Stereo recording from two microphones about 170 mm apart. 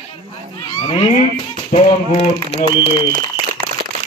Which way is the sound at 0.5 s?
25° left (ahead or behind).